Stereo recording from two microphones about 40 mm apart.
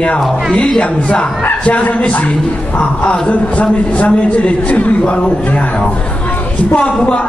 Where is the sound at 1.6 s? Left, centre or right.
Left.